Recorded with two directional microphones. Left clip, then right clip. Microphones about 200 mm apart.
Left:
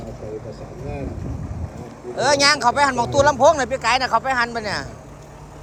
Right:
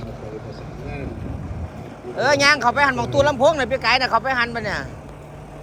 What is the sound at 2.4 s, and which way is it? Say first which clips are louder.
Speech: even; 5° left (ahead or behind).